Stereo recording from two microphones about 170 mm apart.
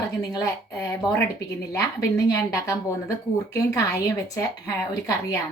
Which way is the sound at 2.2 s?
20° left (ahead or behind).